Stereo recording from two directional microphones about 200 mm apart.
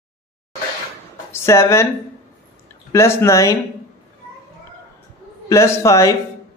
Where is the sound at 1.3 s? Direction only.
15° left (ahead or behind).